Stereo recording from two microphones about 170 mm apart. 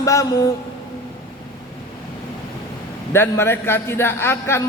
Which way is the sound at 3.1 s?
15° left (ahead or behind).